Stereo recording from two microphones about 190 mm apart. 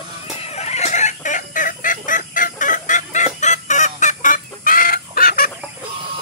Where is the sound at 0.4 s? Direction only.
35° left (ahead or behind); by 5.5 s 50° left (ahead or behind).